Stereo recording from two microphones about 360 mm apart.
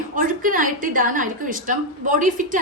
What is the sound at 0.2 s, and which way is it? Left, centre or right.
A woman's voice, right.